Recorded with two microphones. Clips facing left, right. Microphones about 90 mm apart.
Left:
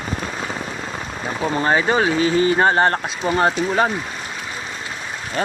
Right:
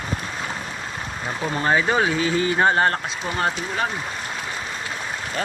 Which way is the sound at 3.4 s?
25° left (ahead or behind).